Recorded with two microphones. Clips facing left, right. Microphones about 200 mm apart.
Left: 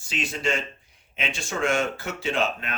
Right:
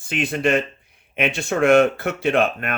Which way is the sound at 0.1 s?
55° right (ahead or behind).